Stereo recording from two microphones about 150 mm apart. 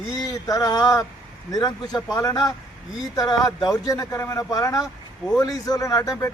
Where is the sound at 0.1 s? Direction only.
25° left (ahead or behind).